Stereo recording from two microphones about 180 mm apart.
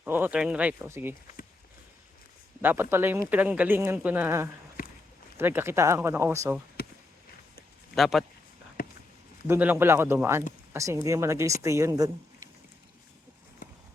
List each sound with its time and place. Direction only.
0.0 s speech: 10° right (ahead or behind)
2.6 s speech: 10° right (ahead or behind)
6.8 s a sound: 55° left (ahead or behind)
7.9 s speech: centre (ahead or behind)
8.8 s a sound: 55° left (ahead or behind)
9.5 s speech: 10° right (ahead or behind)